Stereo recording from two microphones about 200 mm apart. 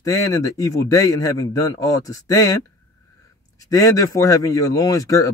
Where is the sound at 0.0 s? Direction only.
15° left (ahead or behind).